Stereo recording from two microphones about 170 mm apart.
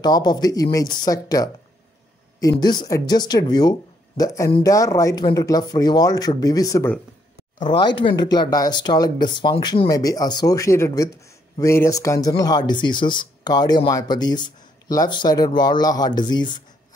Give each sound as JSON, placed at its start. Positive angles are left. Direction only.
{"t": 0.0, "sound": "speech", "side_deg": 25}
{"t": 2.5, "sound": "speech", "side_deg": 25}